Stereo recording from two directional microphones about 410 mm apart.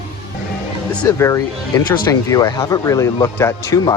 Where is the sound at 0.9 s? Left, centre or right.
Centre.